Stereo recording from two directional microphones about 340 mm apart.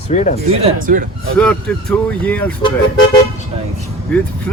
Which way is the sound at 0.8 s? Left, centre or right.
Right.